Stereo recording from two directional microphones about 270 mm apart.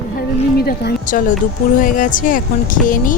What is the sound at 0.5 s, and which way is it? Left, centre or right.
Speech, left.